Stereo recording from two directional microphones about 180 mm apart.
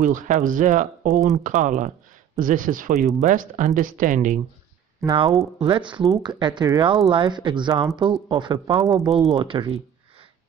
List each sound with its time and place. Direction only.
0.0 s speech: 45° right (ahead or behind)
5.0 s speech: 25° right (ahead or behind)